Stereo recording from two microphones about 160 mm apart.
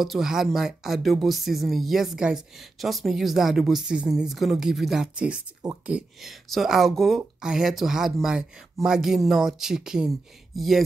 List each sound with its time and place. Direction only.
0.0 s speech: centre (ahead or behind)